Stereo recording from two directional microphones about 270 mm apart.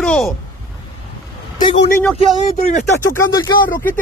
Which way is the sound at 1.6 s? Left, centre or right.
Left.